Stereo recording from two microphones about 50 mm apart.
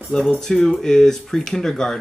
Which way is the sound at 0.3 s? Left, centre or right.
Centre.